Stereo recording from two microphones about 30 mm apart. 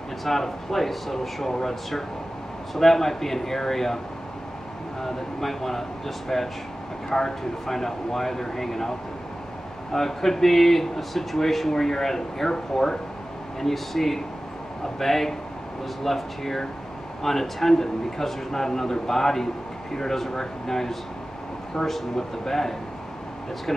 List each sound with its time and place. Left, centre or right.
0.2 s a man's voice: centre
5.0 s a man's voice: centre
9.9 s a man's voice: centre